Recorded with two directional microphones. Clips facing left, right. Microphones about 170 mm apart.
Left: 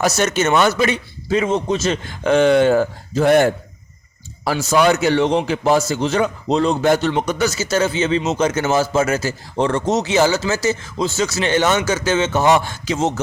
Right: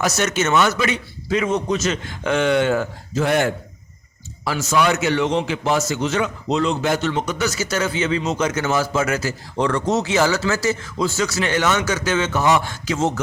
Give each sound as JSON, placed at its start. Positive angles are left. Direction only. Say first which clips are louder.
{"t": 0.0, "sound": "a man's voice", "louder": "left 3 dB", "side_deg": 30}